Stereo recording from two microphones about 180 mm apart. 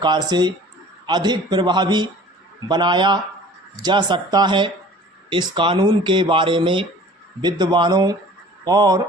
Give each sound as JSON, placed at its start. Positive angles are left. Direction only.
{"t": 0.0, "sound": "speech", "side_deg": -25}